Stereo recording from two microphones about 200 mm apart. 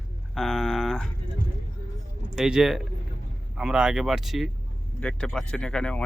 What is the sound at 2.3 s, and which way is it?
Speech, 5° right (ahead or behind).